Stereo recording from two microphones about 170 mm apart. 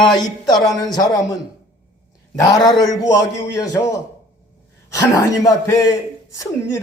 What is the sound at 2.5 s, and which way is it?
A man's voice, 25° left (ahead or behind).